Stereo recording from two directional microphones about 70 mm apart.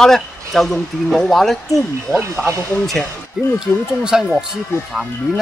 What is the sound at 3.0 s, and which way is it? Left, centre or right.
Speech, centre.